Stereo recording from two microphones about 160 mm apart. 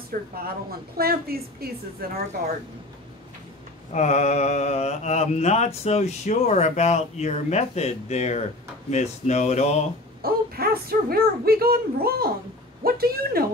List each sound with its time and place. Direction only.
0.4 s speech: 70° right (ahead or behind)
3.9 s mantra: 45° left (ahead or behind)
10.2 s speech: 70° right (ahead or behind)